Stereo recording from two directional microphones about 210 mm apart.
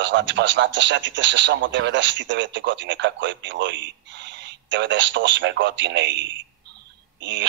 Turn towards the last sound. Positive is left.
turn(degrees=-60)  # may be behind; listen again after turning